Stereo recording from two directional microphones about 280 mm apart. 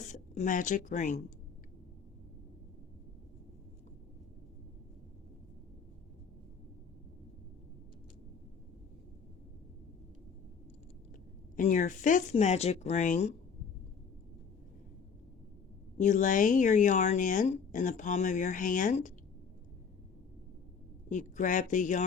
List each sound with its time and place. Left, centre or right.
0.0 s speech: left
11.5 s speech: left
16.0 s speech: left
21.1 s speech: left